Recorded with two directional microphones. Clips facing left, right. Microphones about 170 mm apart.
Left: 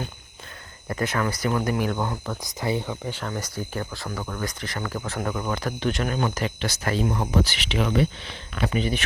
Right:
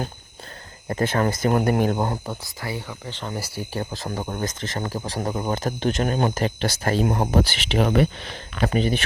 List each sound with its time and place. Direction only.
0.9 s speech: 30° right (ahead or behind)
1.3 s speech: 45° right (ahead or behind)
1.8 s speech: 35° right (ahead or behind)
2.4 s speech: 20° left (ahead or behind)
3.3 s speech: 30° right (ahead or behind)
3.8 s speech: 40° right (ahead or behind)
4.4 s speech: 45° right (ahead or behind)
4.8 s speech: 35° right (ahead or behind)
7.0 s speech: 45° right (ahead or behind)
7.4 s speech: 30° right (ahead or behind)
7.8 s speech: 45° right (ahead or behind)